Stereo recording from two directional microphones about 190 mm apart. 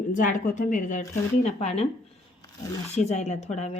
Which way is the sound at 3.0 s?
35° left (ahead or behind).